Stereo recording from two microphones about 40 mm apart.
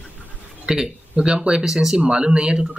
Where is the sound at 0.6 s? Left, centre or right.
Centre.